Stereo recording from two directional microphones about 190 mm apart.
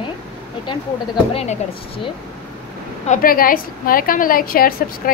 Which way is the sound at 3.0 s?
45° left (ahead or behind).